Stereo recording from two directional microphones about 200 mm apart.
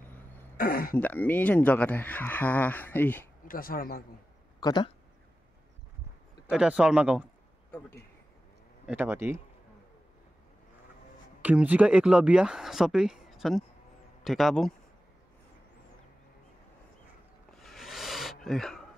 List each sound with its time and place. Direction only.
0.6 s speech: 45° left (ahead or behind)
0.9 s speech: 10° left (ahead or behind)
3.4 s speech: 45° left (ahead or behind)
4.6 s speech: 20° left (ahead or behind)
6.5 s speech: 5° right (ahead or behind)
8.8 s speech: 10° right (ahead or behind)
11.4 s speech: 5° right (ahead or behind)
17.6 s a sound: centre (ahead or behind)